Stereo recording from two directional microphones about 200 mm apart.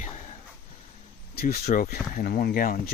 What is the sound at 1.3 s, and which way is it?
Speech, 50° left (ahead or behind).